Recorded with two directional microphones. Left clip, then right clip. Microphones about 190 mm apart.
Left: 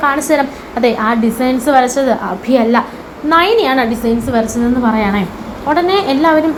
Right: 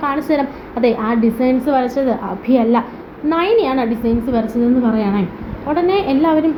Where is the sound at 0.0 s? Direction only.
Centre (ahead or behind).